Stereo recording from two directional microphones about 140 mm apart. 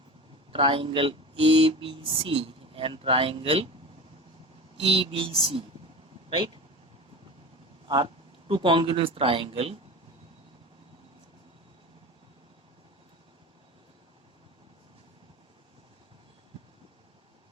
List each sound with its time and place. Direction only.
0.5 s speech: 40° right (ahead or behind)
4.8 s speech: 40° right (ahead or behind)
7.9 s speech: 35° right (ahead or behind)